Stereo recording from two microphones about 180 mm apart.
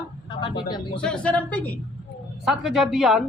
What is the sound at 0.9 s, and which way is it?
Speech, 5° left (ahead or behind).